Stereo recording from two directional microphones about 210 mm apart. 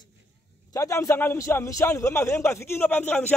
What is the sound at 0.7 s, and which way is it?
A man's voice, 15° left (ahead or behind).